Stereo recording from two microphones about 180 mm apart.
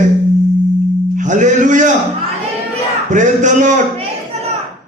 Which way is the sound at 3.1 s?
45° right (ahead or behind).